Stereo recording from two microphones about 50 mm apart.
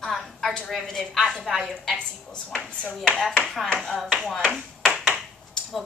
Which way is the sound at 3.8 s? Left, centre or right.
Centre.